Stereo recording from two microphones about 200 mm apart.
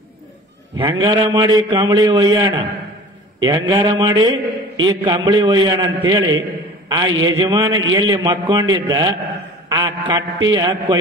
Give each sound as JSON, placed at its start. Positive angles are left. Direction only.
{"t": 0.7, "sound": "a man's voice", "side_deg": -25}